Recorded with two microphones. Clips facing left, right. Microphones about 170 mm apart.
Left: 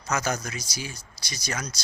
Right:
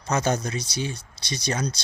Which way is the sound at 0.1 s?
30° right (ahead or behind).